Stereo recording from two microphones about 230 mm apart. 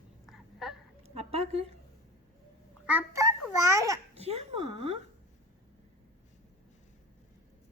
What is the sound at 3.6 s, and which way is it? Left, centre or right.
Babbling, centre.